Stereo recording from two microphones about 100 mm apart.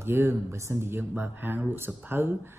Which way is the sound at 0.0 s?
25° right (ahead or behind).